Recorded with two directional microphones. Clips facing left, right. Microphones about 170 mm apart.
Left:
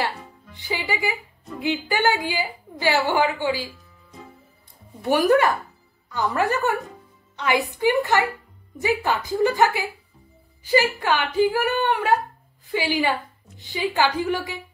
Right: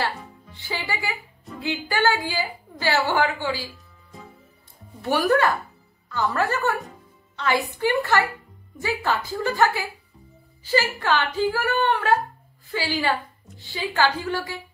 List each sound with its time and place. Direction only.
0.6 s a woman's voice: 15° left (ahead or behind)
5.0 s a woman's voice: 15° left (ahead or behind)